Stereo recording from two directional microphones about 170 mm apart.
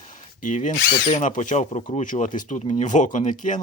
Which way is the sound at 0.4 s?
45° left (ahead or behind).